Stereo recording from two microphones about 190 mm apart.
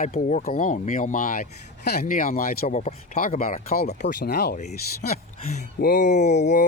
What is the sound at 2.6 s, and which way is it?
Speech, 35° left (ahead or behind).